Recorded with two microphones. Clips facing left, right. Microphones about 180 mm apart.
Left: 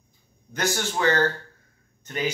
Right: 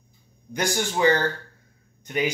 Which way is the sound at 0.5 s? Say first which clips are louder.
Right 1 dB; 15° right (ahead or behind).